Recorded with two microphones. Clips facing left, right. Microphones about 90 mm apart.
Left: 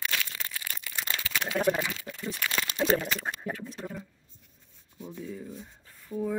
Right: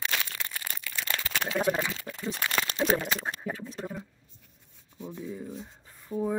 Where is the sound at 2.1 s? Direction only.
35° right (ahead or behind).